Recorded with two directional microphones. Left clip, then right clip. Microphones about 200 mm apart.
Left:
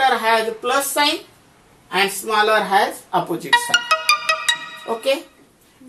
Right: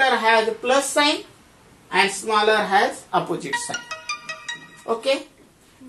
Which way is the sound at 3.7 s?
45° left (ahead or behind).